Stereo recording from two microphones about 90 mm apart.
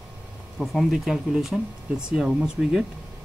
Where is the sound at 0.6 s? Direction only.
Centre (ahead or behind).